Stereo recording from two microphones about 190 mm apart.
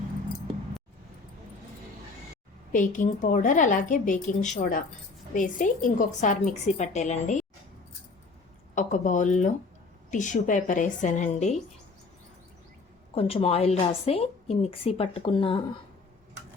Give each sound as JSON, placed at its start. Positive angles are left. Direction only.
{"t": 2.7, "sound": "a woman's voice", "side_deg": 45}
{"t": 8.7, "sound": "a woman's voice", "side_deg": 40}
{"t": 13.1, "sound": "a woman's voice", "side_deg": 30}